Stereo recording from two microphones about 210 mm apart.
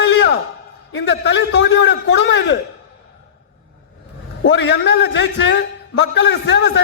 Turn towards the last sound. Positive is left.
turn(degrees=55)  # may be behind; listen again after turning